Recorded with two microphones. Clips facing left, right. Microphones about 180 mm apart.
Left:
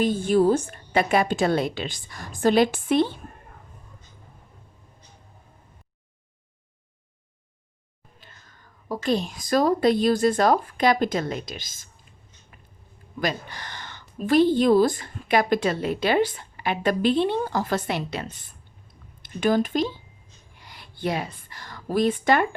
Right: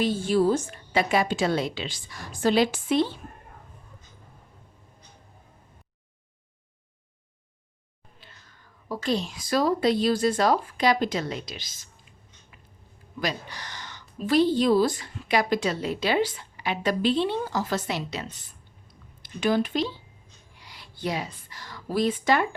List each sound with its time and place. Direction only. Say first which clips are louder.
0.0 s a woman's voice: left 3 dB; 55° left (ahead or behind)
8.2 s speech: left 1 dB; 50° left (ahead or behind)
13.1 s a woman's voice: left 3 dB; 50° left (ahead or behind)